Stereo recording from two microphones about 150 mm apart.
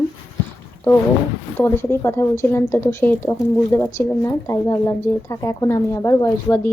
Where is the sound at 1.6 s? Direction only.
15° left (ahead or behind).